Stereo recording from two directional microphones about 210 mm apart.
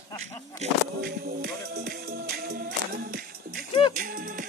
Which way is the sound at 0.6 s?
30° right (ahead or behind).